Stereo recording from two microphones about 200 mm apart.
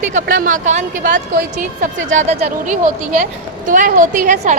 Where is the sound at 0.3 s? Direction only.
40° right (ahead or behind).